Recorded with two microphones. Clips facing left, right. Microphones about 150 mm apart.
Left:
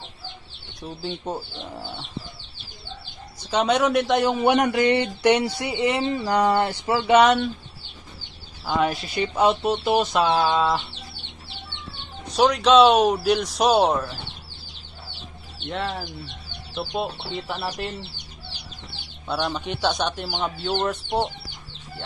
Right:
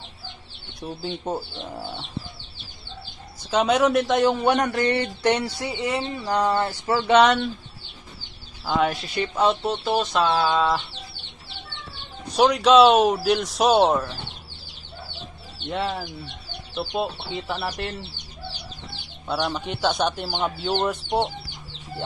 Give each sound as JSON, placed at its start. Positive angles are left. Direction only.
{"t": 0.7, "sound": "speech", "side_deg": -5}
{"t": 3.4, "sound": "speech", "side_deg": 0}
{"t": 4.9, "sound": "chicken", "side_deg": 15}
{"t": 8.6, "sound": "speech", "side_deg": 0}
{"t": 9.6, "sound": "chicken", "side_deg": 10}
{"t": 12.4, "sound": "speech", "side_deg": -5}
{"t": 15.7, "sound": "speech", "side_deg": -5}
{"t": 19.2, "sound": "speech", "side_deg": -10}